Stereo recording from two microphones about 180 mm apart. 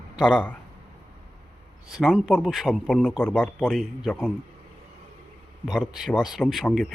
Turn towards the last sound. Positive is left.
turn(degrees=5)  # may be behind; listen again after turning